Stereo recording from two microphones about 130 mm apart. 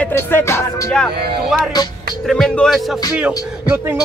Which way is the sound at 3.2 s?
10° right (ahead or behind).